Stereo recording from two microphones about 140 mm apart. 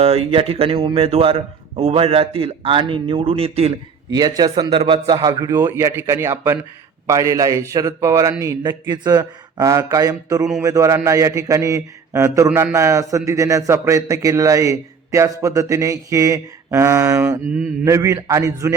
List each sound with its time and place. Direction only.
0.0 s speech: 45° right (ahead or behind)
4.1 s a man's voice: 30° right (ahead or behind)